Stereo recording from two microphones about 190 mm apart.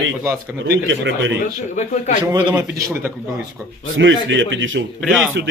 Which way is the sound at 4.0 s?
80° right.